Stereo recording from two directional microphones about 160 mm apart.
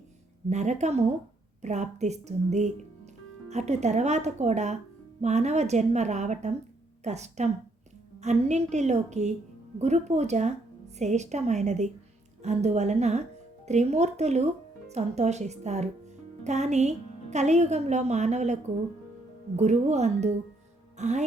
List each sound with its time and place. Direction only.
0.5 s a woman's voice: 45° right (ahead or behind)